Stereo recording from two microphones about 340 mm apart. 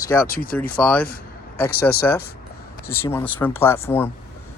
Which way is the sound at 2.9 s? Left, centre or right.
Centre.